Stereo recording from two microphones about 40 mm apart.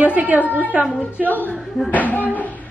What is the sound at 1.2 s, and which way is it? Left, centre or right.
A woman's voice, left.